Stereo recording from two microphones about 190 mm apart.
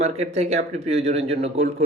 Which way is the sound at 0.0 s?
35° right (ahead or behind).